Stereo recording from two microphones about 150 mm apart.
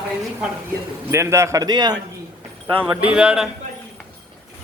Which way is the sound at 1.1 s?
20° right (ahead or behind).